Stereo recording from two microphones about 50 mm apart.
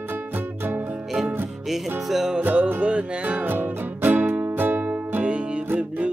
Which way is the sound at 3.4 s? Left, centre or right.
Right.